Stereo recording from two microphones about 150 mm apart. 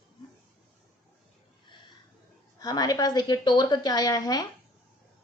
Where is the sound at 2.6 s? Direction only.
25° left (ahead or behind).